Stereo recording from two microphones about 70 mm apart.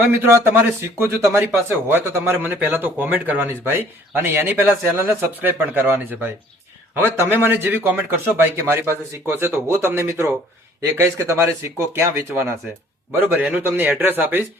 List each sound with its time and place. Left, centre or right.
0.0 s a man's voice: right